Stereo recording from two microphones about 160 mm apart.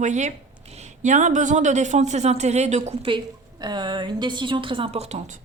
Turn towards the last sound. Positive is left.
turn(degrees=-45)  # may be behind; listen again after turning